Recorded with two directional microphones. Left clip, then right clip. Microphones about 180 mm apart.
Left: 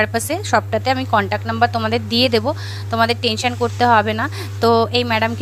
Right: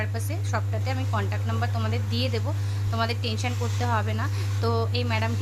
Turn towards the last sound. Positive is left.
turn(degrees=45)  # may be behind; listen again after turning